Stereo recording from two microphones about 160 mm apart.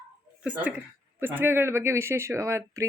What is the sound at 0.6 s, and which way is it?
Speech, 10° right (ahead or behind).